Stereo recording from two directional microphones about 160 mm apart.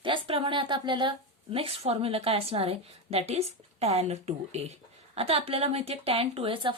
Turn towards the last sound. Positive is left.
turn(degrees=-35)  # may be behind; listen again after turning